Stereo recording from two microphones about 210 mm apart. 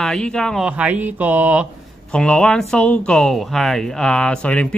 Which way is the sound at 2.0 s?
5° left (ahead or behind).